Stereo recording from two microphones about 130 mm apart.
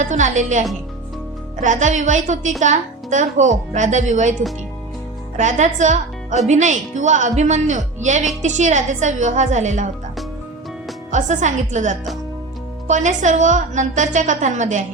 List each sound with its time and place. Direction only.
0.0 s a woman's voice: 70° right (ahead or behind)
1.6 s a woman's voice: 70° right (ahead or behind)
5.4 s a woman's voice: 65° right (ahead or behind)
11.1 s a woman's voice: 70° right (ahead or behind)